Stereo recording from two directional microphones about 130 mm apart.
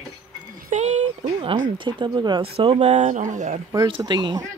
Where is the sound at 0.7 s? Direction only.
65° right (ahead or behind).